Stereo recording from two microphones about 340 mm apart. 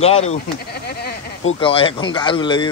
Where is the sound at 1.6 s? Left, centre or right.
Centre.